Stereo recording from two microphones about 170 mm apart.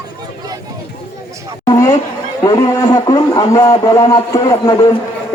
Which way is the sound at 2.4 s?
25° left (ahead or behind).